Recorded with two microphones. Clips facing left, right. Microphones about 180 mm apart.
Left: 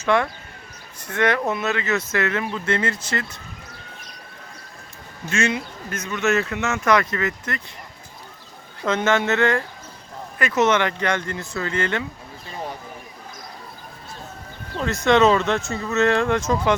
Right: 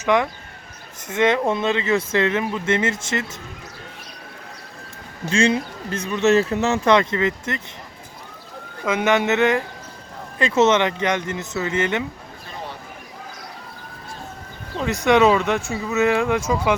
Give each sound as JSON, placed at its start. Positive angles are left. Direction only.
{"t": 0.0, "sound": "speech", "side_deg": -15}
{"t": 5.3, "sound": "speech", "side_deg": -30}
{"t": 8.8, "sound": "speech", "side_deg": -10}
{"t": 14.8, "sound": "speech", "side_deg": -15}